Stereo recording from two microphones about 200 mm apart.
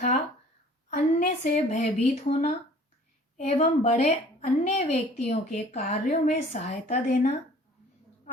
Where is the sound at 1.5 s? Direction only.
35° left (ahead or behind).